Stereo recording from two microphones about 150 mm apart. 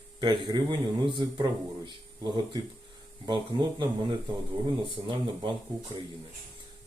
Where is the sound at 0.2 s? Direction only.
30° right (ahead or behind).